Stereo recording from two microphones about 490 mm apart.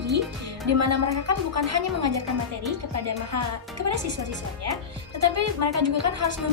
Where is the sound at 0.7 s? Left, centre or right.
Right.